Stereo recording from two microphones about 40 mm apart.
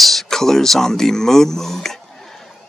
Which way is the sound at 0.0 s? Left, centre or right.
Centre.